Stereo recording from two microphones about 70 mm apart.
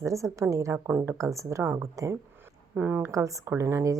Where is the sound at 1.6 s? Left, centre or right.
Right.